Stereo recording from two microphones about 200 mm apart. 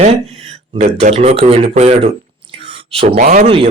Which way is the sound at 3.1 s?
45° right (ahead or behind).